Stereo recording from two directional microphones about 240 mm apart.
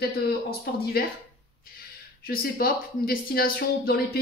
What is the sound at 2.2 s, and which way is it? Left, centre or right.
Speech, left.